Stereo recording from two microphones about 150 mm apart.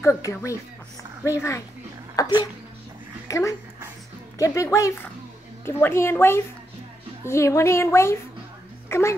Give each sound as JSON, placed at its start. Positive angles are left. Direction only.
{"t": 0.0, "sound": "a woman's voice", "side_deg": 20}
{"t": 8.8, "sound": "dog", "side_deg": 15}